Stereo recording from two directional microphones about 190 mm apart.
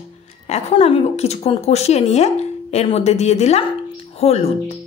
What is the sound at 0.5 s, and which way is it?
A woman's voice, 35° left (ahead or behind).